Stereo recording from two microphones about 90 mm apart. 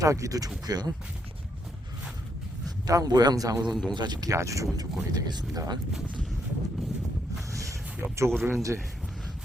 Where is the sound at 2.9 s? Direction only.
45° right (ahead or behind).